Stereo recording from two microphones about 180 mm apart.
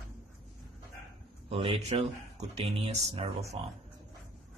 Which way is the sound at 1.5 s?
30° right (ahead or behind).